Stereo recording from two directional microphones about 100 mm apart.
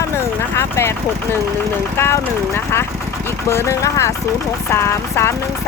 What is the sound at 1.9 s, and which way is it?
Speech, 25° left (ahead or behind).